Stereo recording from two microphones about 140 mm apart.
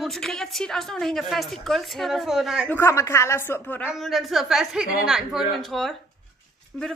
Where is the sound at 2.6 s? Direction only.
15° left (ahead or behind).